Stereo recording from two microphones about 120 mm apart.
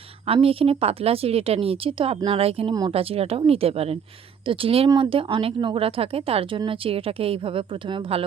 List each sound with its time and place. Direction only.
0.4 s speech: 50° right (ahead or behind)